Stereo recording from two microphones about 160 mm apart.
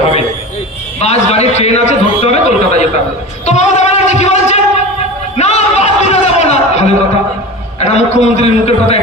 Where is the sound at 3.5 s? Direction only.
45° left (ahead or behind).